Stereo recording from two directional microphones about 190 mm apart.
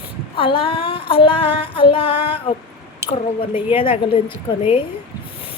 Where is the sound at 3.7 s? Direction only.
30° left (ahead or behind).